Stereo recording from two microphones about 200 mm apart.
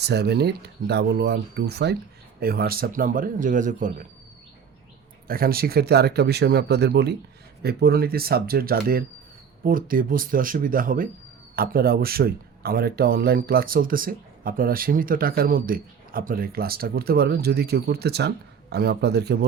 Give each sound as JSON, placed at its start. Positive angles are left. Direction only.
{"t": 0.0, "sound": "speech", "side_deg": -55}
{"t": 5.3, "sound": "speech", "side_deg": -50}